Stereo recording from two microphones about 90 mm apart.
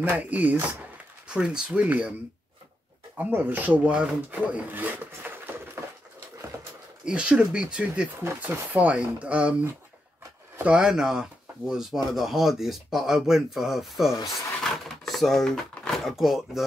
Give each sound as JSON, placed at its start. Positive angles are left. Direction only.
{"t": 0.1, "sound": "speech", "side_deg": -15}
{"t": 3.2, "sound": "speech", "side_deg": -20}
{"t": 7.1, "sound": "speech", "side_deg": -10}
{"t": 10.6, "sound": "speech", "side_deg": -10}